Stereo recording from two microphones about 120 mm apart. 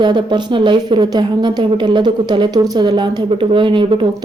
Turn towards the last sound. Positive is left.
turn(degrees=-40)  # may be behind; listen again after turning